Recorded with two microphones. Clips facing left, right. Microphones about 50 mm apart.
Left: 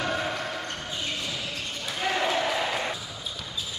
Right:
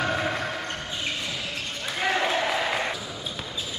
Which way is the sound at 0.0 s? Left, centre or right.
Right.